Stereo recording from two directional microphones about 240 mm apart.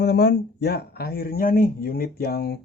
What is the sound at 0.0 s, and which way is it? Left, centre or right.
Speech, left.